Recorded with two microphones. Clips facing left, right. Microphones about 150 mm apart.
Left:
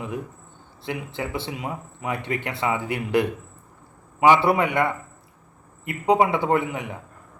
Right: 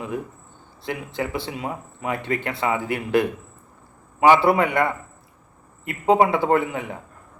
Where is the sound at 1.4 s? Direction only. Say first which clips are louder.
Right 1 dB; 20° left (ahead or behind).